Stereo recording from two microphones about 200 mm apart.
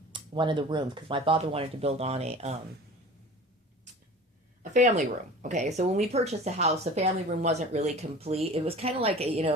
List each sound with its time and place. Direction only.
0.1 s speech: 25° right (ahead or behind)
4.6 s speech: 40° right (ahead or behind)